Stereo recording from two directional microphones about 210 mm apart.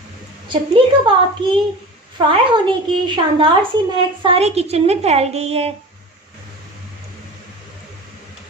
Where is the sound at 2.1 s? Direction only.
25° right (ahead or behind).